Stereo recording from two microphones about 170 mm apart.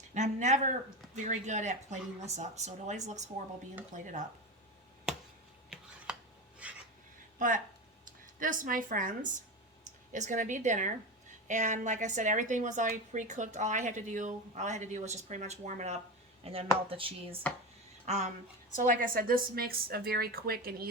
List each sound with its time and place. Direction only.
0.1 s a woman's voice: 45° right (ahead or behind)
6.1 s a sound: 5° right (ahead or behind)
7.3 s a woman's voice: 50° right (ahead or behind); by 17.1 s 35° right (ahead or behind)
17.5 s speech: 10° left (ahead or behind)
18.0 s speech: 40° right (ahead or behind)
18.8 s a woman's voice: 55° right (ahead or behind)